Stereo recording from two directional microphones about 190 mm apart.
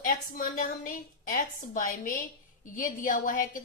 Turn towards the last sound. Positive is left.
turn(degrees=45)  # may be behind; listen again after turning